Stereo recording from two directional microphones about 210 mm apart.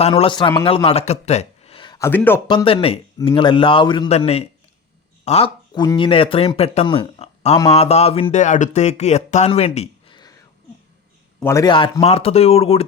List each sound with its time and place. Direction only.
0.0 s a man's voice: 25° left (ahead or behind); by 2.4 s 10° left (ahead or behind)
2.5 s speech: 25° left (ahead or behind)
11.3 s speech: 15° left (ahead or behind); by 12.8 s 30° left (ahead or behind)